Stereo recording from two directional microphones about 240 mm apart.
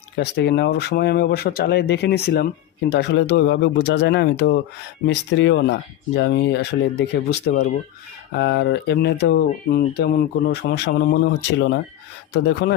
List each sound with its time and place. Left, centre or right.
0.2 s speech: left